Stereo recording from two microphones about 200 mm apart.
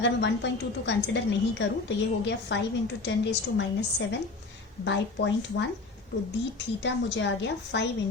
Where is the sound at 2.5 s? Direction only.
65° left (ahead or behind).